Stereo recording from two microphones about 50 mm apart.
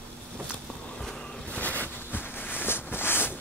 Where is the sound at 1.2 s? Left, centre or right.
Left.